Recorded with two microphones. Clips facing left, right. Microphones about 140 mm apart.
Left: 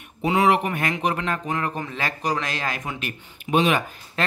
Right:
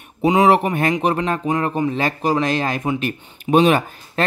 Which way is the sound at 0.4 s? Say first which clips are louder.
Right 4 dB; 30° right (ahead or behind).